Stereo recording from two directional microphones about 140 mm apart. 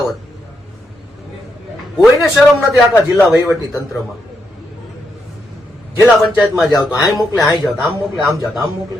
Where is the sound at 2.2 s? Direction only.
Centre (ahead or behind).